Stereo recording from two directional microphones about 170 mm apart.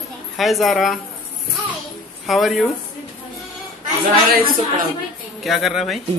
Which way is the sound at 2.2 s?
Centre (ahead or behind).